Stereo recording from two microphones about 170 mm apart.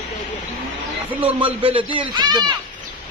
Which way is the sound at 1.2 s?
30° right (ahead or behind).